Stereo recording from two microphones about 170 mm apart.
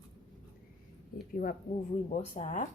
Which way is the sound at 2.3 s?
45° left (ahead or behind).